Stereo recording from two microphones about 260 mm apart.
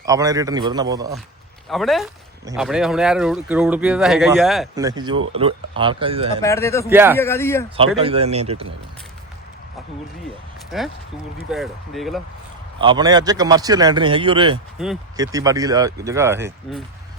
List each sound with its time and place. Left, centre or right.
0.0 s speech: centre
1.7 s speech: centre
4.7 s speech: centre
6.4 s speech: centre
6.9 s speech: centre
7.2 s speech: centre
7.9 s speech: right
10.7 s speech: centre
12.8 s speech: centre
14.8 s speech: centre
15.1 s speech: centre